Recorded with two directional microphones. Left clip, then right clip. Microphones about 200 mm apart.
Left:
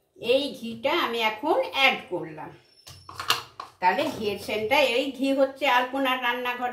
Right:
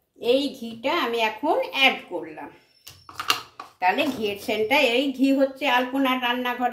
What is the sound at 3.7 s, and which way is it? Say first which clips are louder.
A woman's voice: right 1 dB; 55° right (ahead or behind).